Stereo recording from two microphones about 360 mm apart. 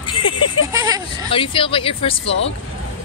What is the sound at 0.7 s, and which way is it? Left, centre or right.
Speech, centre.